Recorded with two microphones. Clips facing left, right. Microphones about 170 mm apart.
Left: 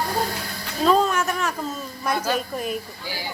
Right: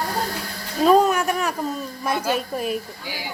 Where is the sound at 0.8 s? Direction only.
10° right (ahead or behind).